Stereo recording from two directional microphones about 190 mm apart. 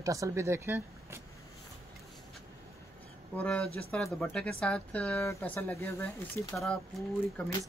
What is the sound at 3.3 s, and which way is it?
Speech, 5° left (ahead or behind).